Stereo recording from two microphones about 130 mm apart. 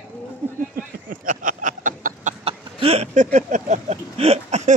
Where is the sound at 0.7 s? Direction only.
90° right.